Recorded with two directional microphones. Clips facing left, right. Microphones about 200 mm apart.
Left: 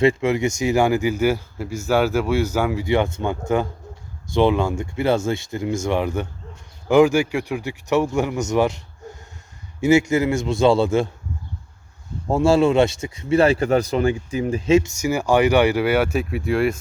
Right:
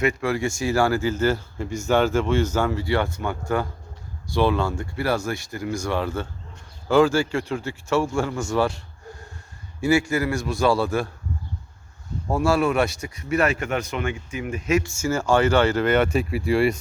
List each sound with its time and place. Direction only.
0.0 s speech: 25° left (ahead or behind)
9.8 s speech: 20° left (ahead or behind)
12.3 s speech: 25° left (ahead or behind); by 16.8 s centre (ahead or behind)